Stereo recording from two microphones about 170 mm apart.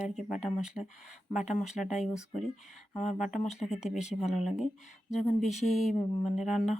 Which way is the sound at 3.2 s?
40° left (ahead or behind).